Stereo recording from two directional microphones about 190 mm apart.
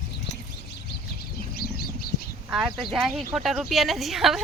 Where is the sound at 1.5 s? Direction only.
55° left (ahead or behind).